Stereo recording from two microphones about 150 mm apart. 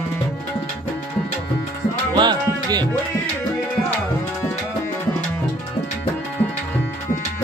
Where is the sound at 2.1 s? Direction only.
30° right (ahead or behind).